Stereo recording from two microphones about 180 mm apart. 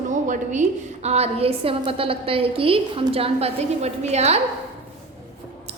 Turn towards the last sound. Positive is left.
turn(degrees=-35)  # may be behind; listen again after turning